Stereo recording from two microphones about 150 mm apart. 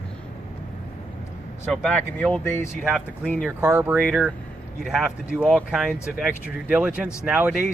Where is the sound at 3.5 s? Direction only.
15° right (ahead or behind).